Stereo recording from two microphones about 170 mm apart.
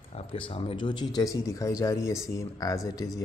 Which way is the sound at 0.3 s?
35° left (ahead or behind).